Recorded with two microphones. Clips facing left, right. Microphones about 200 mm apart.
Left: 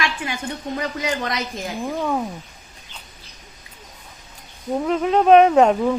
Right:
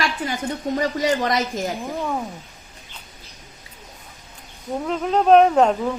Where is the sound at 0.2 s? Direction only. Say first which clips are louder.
Right 2 dB; 35° right (ahead or behind).